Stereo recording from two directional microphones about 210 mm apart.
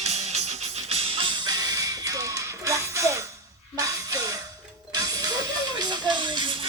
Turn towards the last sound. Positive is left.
turn(degrees=-20)  # may be behind; listen again after turning